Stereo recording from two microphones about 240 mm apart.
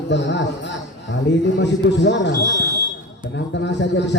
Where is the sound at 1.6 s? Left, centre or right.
Left.